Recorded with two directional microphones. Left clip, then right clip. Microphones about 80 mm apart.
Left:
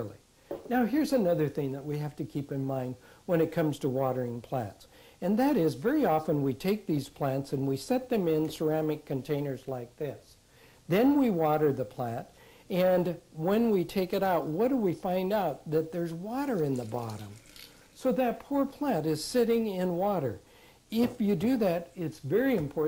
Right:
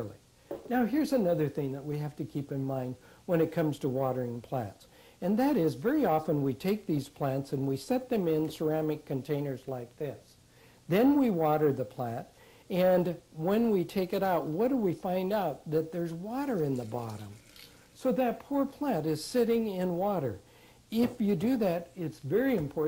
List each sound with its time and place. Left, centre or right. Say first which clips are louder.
0.0 s speech: left 1 dB; right